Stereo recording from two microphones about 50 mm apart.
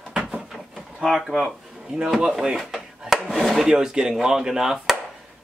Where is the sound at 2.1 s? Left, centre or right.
Centre.